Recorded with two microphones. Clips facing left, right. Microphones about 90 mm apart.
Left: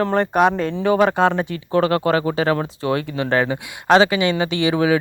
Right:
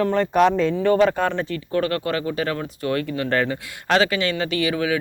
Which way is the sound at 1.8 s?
25° left (ahead or behind).